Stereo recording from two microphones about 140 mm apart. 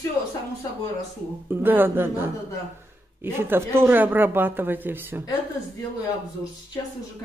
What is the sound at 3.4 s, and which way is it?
Speech, 15° right (ahead or behind).